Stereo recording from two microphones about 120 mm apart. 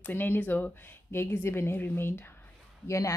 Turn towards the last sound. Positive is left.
turn(degrees=25)  # may be behind; listen again after turning